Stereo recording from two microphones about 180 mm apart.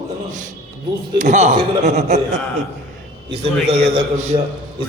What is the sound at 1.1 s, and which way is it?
A man's voice, 40° right (ahead or behind).